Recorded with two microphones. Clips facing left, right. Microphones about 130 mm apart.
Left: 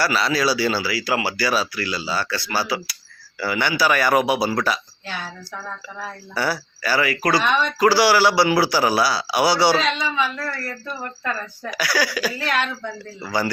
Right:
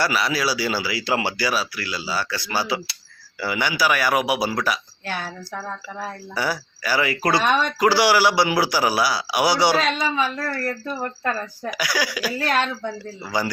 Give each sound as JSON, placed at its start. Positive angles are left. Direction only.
{"t": 0.0, "sound": "a man's voice", "side_deg": -15}
{"t": 1.5, "sound": "a man's voice", "side_deg": -5}
{"t": 5.0, "sound": "a sound", "side_deg": -50}
{"t": 6.3, "sound": "a man's voice", "side_deg": -10}
{"t": 7.1, "sound": "speech", "side_deg": -25}
{"t": 7.4, "sound": "speech", "side_deg": -40}
{"t": 7.8, "sound": "a man's voice", "side_deg": -20}
{"t": 9.7, "sound": "a sound", "side_deg": -45}
{"t": 11.2, "sound": "speech", "side_deg": -40}
{"t": 11.7, "sound": "a man's voice", "side_deg": -15}
{"t": 12.4, "sound": "speech", "side_deg": -35}
{"t": 13.2, "sound": "a man's voice", "side_deg": -15}